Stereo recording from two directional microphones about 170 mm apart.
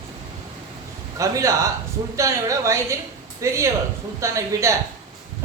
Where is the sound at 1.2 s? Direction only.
20° right (ahead or behind).